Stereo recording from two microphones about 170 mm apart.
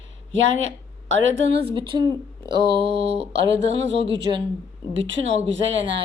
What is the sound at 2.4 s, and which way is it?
Mantra, 25° right (ahead or behind).